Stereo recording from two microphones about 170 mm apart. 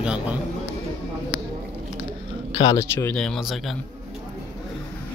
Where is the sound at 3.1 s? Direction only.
5° left (ahead or behind).